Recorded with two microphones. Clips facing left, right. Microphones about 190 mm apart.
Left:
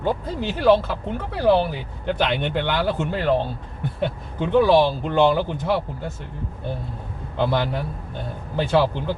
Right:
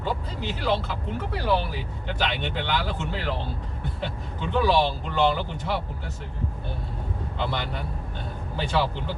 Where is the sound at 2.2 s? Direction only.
55° left (ahead or behind).